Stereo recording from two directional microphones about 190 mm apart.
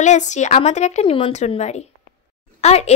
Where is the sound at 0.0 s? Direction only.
40° left (ahead or behind).